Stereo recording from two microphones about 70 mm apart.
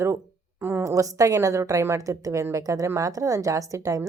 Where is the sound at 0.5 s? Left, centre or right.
Right.